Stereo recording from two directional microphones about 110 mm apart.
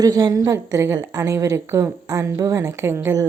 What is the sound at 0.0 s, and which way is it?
A woman's voice, 35° right (ahead or behind).